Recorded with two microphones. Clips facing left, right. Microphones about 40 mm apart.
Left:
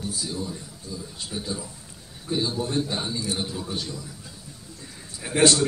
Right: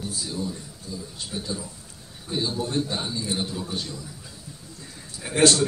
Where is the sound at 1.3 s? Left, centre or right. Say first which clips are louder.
Even; centre.